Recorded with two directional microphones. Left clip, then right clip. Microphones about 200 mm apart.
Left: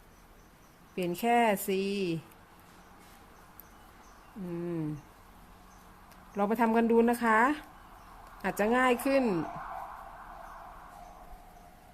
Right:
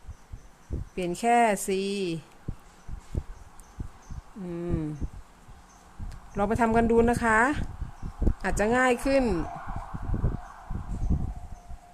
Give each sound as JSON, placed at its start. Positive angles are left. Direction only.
{"t": 0.9, "sound": "speech", "side_deg": -10}
{"t": 4.5, "sound": "speech", "side_deg": -10}
{"t": 6.3, "sound": "speech", "side_deg": -10}